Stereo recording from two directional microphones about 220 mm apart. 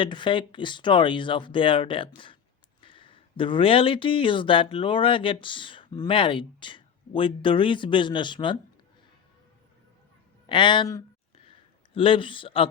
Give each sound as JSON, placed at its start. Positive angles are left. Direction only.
{"t": 0.0, "sound": "speech", "side_deg": 20}
{"t": 10.5, "sound": "speech", "side_deg": 20}